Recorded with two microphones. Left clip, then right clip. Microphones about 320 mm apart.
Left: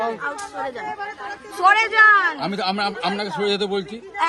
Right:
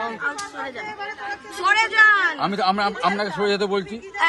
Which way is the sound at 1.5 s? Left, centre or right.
Centre.